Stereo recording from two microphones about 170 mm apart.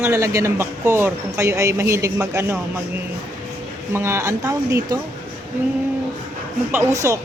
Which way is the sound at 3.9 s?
15° right (ahead or behind).